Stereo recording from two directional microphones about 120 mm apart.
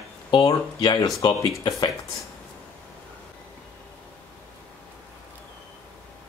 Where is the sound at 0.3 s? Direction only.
40° left (ahead or behind).